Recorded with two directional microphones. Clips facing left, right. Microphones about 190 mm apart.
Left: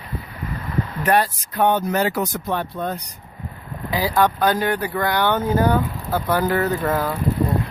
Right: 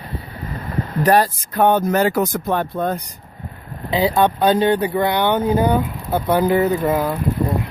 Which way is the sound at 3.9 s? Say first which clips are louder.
Right 3 dB; 25° right (ahead or behind).